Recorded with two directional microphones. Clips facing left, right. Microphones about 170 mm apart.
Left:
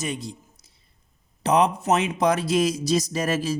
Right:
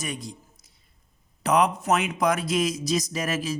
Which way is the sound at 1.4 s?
25° left (ahead or behind).